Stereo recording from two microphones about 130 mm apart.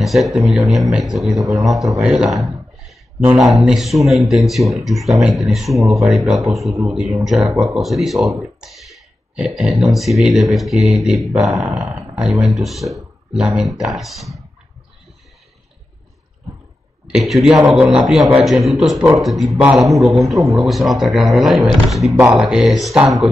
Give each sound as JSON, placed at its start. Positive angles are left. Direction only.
{"t": 0.0, "sound": "a man's voice", "side_deg": 0}
{"t": 2.9, "sound": "a sound", "side_deg": 0}
{"t": 3.6, "sound": "a man's voice", "side_deg": 0}
{"t": 17.1, "sound": "a man's voice", "side_deg": 0}